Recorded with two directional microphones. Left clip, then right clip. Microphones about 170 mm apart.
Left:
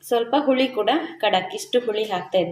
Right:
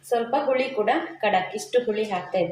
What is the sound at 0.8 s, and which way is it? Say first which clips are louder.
Speech: left 2 dB; 45° left (ahead or behind).